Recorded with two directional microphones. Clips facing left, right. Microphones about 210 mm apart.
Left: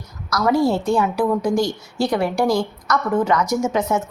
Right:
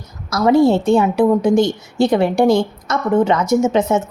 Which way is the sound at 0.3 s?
25° right (ahead or behind).